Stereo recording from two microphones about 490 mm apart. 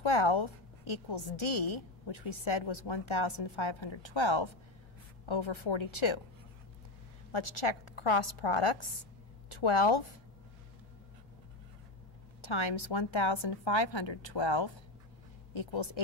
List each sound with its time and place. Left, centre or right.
0.0 s a woman's voice: left
7.3 s a woman's voice: left
9.5 s a woman's voice: left
12.4 s a woman's voice: left